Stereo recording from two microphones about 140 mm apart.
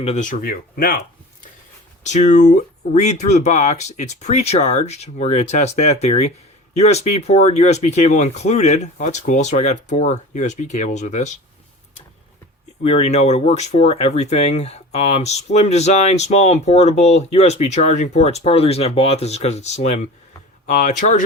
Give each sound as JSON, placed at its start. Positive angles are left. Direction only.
{"t": 0.0, "sound": "speech", "side_deg": 50}
{"t": 0.3, "sound": "speech", "side_deg": 90}
{"t": 2.0, "sound": "speech", "side_deg": 55}
{"t": 12.8, "sound": "speech", "side_deg": 55}
{"t": 20.7, "sound": "speech", "side_deg": 65}